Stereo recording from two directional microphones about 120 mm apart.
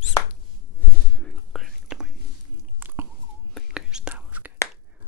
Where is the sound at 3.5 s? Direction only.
Centre (ahead or behind).